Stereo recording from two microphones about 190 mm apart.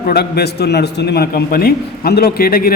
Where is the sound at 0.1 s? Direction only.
60° left (ahead or behind).